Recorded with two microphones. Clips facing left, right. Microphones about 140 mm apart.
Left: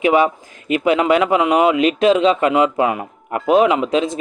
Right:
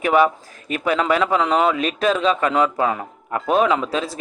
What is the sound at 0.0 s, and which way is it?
Speech, 15° left (ahead or behind).